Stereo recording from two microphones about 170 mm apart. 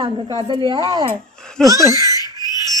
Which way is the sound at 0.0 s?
30° right (ahead or behind).